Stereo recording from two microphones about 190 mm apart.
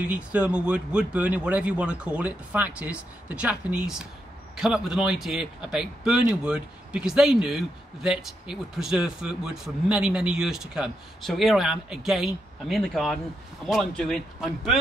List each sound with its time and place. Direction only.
0.1 s speech: 5° right (ahead or behind)